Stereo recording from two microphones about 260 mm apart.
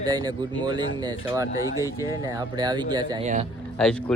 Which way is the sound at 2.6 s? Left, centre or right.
Centre.